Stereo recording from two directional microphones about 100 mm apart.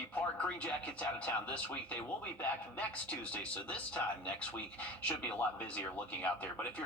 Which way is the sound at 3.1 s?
15° left (ahead or behind).